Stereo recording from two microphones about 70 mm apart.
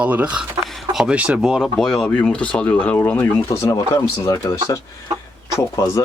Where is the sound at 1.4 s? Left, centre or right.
Centre.